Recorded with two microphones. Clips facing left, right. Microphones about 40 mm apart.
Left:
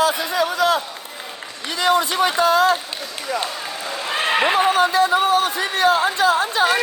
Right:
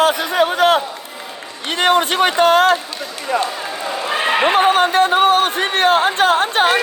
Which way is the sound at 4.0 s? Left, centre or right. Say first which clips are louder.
Right 2 dB; centre.